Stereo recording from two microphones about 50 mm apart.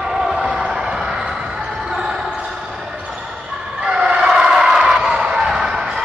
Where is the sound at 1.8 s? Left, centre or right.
Centre.